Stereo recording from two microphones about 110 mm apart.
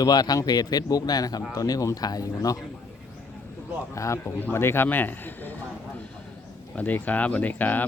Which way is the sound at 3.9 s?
30° left (ahead or behind).